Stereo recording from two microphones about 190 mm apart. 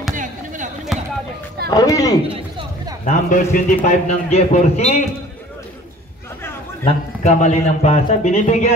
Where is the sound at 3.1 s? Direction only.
40° left (ahead or behind).